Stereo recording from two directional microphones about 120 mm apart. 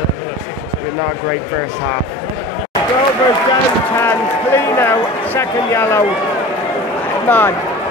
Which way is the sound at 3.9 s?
20° left (ahead or behind).